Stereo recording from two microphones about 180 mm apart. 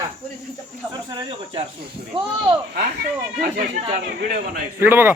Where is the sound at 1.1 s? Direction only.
25° right (ahead or behind).